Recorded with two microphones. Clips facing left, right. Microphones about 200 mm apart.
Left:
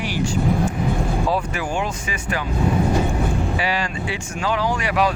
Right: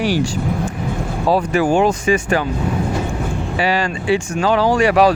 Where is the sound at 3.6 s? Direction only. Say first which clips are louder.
Right 5 dB; 30° right (ahead or behind).